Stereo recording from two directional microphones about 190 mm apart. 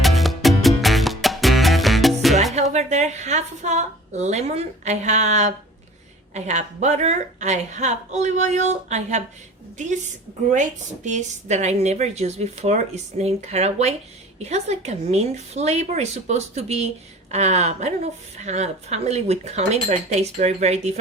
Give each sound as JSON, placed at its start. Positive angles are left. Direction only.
{"t": 0.0, "sound": "music", "side_deg": 0}
{"t": 2.7, "sound": "a woman's voice", "side_deg": -35}
{"t": 10.5, "sound": "a woman's voice", "side_deg": -40}